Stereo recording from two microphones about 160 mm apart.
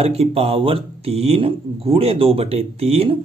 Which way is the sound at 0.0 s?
40° right (ahead or behind).